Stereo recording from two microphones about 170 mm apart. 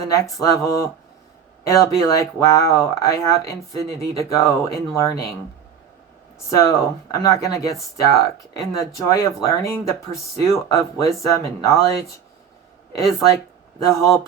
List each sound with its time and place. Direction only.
0.0 s speech: 20° left (ahead or behind)
6.5 s speech: 20° left (ahead or behind)
13.0 s speech: 20° left (ahead or behind)